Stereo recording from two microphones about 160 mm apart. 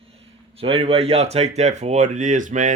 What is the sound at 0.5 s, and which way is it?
Speech, 35° right (ahead or behind).